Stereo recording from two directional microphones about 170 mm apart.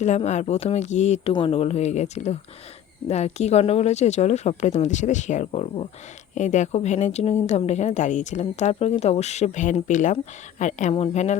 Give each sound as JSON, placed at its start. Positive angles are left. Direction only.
{"t": 0.0, "sound": "speech", "side_deg": 40}
{"t": 1.3, "sound": "speech", "side_deg": 30}